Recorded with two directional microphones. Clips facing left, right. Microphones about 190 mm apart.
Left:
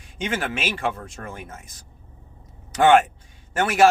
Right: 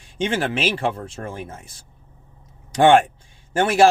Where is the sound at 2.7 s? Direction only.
30° right (ahead or behind).